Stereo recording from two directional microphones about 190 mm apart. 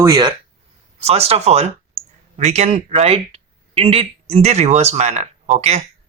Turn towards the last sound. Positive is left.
turn(degrees=-35)  # may be behind; listen again after turning